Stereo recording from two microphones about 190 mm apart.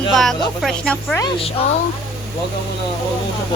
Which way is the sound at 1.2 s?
25° left (ahead or behind).